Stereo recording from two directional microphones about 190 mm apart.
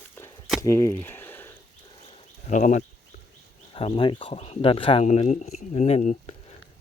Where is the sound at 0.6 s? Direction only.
15° left (ahead or behind).